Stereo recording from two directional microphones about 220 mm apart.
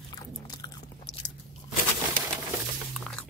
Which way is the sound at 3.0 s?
5° left (ahead or behind).